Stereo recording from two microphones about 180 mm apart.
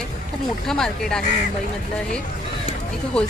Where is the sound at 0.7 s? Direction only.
5° left (ahead or behind).